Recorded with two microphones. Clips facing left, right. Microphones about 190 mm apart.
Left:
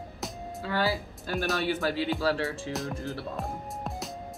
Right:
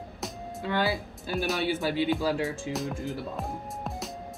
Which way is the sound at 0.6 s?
15° right (ahead or behind).